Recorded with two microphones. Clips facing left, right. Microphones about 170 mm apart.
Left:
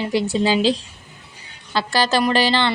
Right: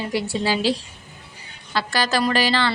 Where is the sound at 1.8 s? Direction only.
25° left (ahead or behind).